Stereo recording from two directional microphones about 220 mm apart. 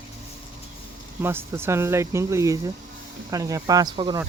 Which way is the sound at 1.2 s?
10° right (ahead or behind).